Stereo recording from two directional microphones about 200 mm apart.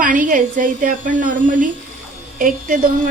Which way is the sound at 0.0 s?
40° right (ahead or behind).